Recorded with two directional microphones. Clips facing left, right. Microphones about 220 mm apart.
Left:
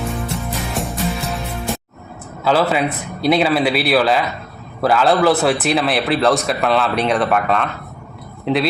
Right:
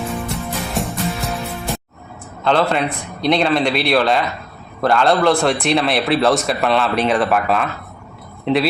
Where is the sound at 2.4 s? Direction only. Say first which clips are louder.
Left 1 dB; 5° left (ahead or behind).